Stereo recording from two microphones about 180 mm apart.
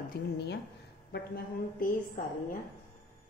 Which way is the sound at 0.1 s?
65° left (ahead or behind).